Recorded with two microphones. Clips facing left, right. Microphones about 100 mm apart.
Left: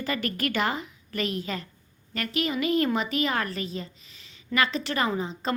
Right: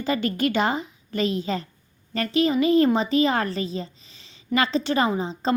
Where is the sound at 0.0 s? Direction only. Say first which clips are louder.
Right 6 dB; 25° right (ahead or behind).